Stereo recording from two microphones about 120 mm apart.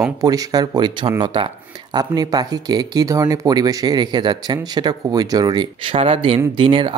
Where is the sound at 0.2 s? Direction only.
30° right (ahead or behind).